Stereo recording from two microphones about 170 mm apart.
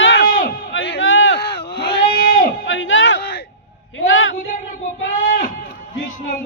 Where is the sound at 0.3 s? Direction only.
55° left (ahead or behind).